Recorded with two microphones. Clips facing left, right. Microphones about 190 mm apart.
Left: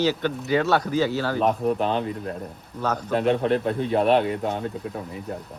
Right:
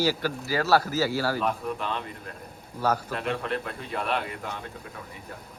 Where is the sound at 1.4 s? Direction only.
35° left (ahead or behind).